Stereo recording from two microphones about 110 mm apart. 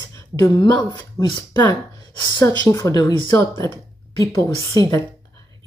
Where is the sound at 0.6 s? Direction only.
45° left (ahead or behind).